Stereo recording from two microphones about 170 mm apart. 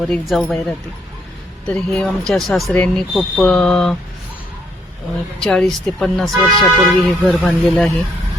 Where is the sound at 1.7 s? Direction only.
5° left (ahead or behind).